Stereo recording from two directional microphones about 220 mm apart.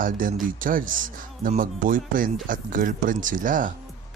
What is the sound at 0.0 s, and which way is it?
Speech, 40° right (ahead or behind).